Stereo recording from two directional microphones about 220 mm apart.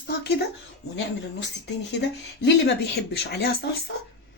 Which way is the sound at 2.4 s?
50° left (ahead or behind).